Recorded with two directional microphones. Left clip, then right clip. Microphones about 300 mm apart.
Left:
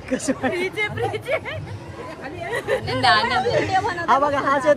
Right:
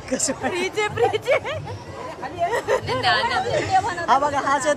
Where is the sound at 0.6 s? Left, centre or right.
Centre.